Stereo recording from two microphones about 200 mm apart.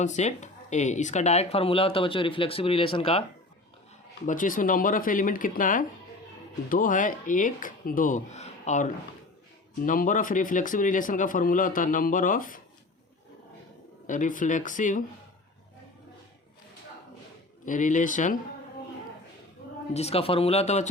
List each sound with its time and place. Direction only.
0.0 s speech: 35° left (ahead or behind)
4.3 s speech: 40° left (ahead or behind)
14.1 s speech: 40° left (ahead or behind)
17.7 s speech: 40° left (ahead or behind)
19.9 s speech: 30° left (ahead or behind)